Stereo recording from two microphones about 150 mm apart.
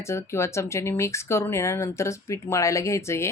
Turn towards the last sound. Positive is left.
turn(degrees=20)  # may be behind; listen again after turning